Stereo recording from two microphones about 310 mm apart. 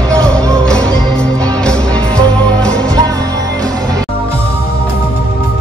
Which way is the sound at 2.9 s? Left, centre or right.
Centre.